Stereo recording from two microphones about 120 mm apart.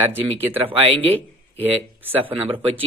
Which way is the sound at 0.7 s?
50° right (ahead or behind).